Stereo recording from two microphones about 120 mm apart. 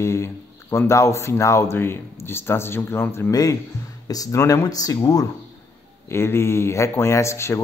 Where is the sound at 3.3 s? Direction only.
30° left (ahead or behind).